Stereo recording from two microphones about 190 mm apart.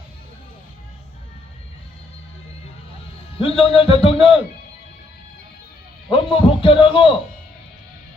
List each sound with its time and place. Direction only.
3.3 s a man's voice: 30° left (ahead or behind)
6.1 s a man's voice: 30° left (ahead or behind)